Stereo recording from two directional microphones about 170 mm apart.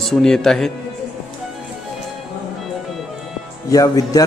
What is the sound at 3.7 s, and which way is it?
Speech, 20° left (ahead or behind).